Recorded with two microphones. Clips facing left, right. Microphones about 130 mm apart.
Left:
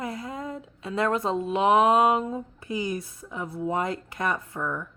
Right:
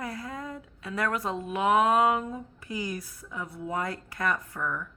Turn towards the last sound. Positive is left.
turn(degrees=25)  # may be behind; listen again after turning